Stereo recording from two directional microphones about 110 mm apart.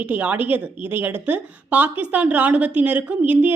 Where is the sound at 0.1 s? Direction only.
15° right (ahead or behind).